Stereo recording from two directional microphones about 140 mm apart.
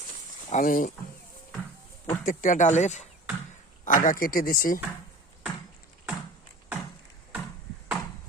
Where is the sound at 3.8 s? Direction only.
70° left (ahead or behind); by 4.8 s 90° left.